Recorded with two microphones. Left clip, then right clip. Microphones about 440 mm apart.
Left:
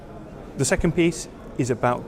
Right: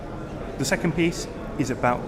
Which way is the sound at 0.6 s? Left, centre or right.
Left.